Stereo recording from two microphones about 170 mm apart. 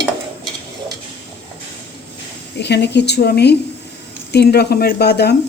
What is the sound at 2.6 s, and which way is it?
Speech, 85° left.